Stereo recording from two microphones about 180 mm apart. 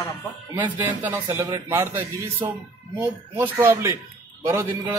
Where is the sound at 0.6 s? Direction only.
10° right (ahead or behind).